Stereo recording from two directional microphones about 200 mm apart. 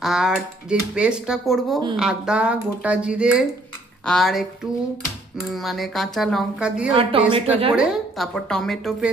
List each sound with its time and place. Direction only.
0.0 s speech: centre (ahead or behind)
6.9 s speech: 30° right (ahead or behind)
7.8 s speech: centre (ahead or behind)